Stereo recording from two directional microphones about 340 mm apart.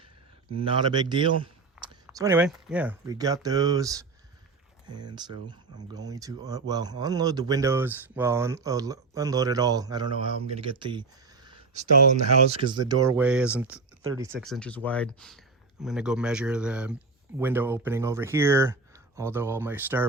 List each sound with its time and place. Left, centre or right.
0.6 s speech: centre